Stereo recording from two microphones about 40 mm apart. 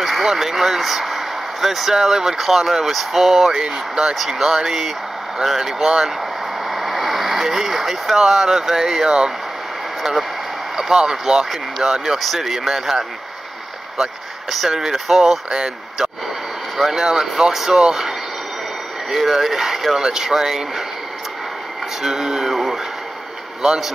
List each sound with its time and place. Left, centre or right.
0.0 s speech: centre
3.6 s speech: right
4.1 s speech: centre
5.9 s speech: centre
6.7 s speech: centre
10.8 s speech: centre
14.5 s speech: centre
16.7 s speech: centre
19.1 s speech: centre
22.0 s a sound: centre
23.6 s speech: centre